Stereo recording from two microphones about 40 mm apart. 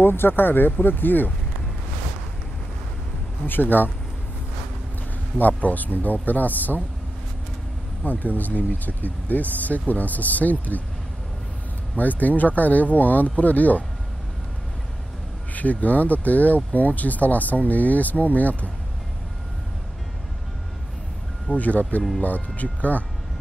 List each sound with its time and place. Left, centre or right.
0.0 s speech: left
3.4 s speech: left
5.6 s speech: left
8.0 s speech: left
12.0 s speech: left
15.5 s speech: left
21.5 s speech: left